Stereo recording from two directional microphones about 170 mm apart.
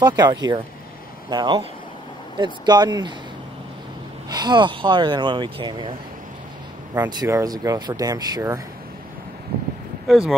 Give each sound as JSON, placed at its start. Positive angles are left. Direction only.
{"t": 0.0, "sound": "speech", "side_deg": -25}
{"t": 4.3, "sound": "speech", "side_deg": -25}
{"t": 7.1, "sound": "speech", "side_deg": -20}
{"t": 10.0, "sound": "speech", "side_deg": 0}